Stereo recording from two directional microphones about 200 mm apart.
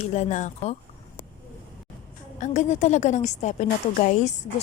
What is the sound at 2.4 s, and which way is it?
A woman's voice, 35° left (ahead or behind).